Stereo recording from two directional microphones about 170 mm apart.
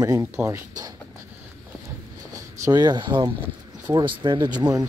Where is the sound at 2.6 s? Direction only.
25° right (ahead or behind).